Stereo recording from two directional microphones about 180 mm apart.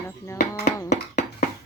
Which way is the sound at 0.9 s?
40° left (ahead or behind).